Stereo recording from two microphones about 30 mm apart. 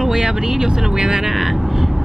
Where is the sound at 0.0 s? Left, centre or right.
Centre.